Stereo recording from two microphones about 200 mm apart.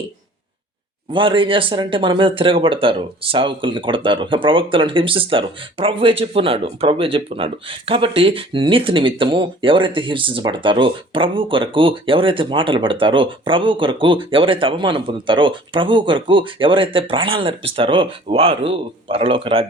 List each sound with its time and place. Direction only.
1.1 s speech: 25° right (ahead or behind)